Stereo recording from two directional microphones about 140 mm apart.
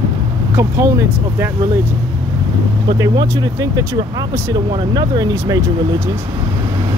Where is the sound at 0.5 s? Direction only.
20° right (ahead or behind).